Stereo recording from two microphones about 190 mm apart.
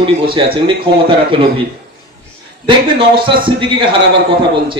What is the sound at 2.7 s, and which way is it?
A man's voice, 25° right (ahead or behind).